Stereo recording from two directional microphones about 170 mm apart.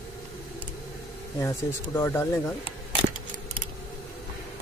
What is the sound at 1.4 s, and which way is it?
Speech, 15° left (ahead or behind).